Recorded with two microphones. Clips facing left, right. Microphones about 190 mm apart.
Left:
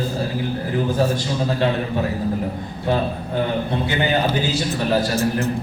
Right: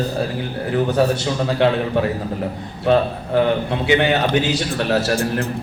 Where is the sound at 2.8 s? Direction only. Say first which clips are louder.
Right 5 dB; 70° right (ahead or behind).